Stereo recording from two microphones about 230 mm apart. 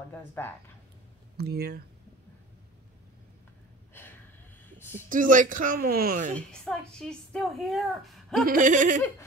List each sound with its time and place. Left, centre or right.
0.4 s speech: centre
1.3 s speech: right
4.7 s speech: centre
5.1 s speech: right
6.3 s a woman's voice: centre
8.5 s speech: right